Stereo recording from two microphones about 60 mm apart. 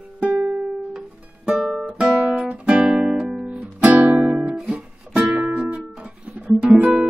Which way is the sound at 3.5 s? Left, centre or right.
Right.